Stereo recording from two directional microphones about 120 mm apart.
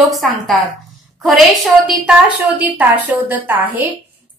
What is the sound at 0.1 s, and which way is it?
A woman's voice, centre (ahead or behind).